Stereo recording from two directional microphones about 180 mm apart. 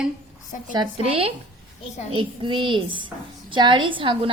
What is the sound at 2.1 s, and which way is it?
A woman's voice, 30° right (ahead or behind).